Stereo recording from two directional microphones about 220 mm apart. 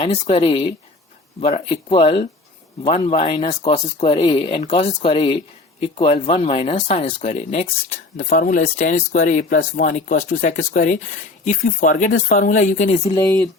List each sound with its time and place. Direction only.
0.0 s speech: 25° left (ahead or behind)